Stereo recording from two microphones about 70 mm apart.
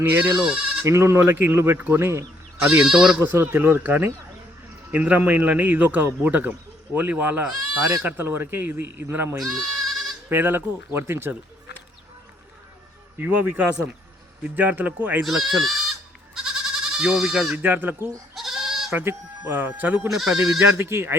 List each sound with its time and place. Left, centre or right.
0.0 s speech: right
0.4 s speech: centre
0.9 s speech: right
2.6 s speech: centre
3.5 s a man's voice: right
9.4 s bleat: centre
10.2 s speech: right
13.1 s a man's voice: right
15.2 s goat: centre
17.5 s a man's voice: right
18.3 s goat: centre
19.0 s a man's voice: right
20.1 s speech: centre
20.7 s speech: right